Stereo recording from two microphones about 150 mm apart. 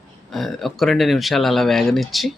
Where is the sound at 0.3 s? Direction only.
Centre (ahead or behind).